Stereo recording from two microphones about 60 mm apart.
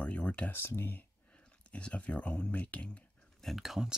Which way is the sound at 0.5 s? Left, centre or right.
Left.